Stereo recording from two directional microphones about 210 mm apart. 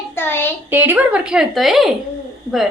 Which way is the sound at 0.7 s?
10° right (ahead or behind).